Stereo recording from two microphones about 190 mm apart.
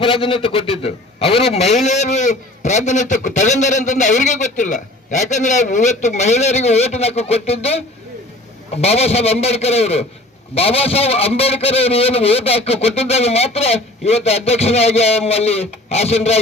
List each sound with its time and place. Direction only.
0.0 s a man's voice: 30° left (ahead or behind)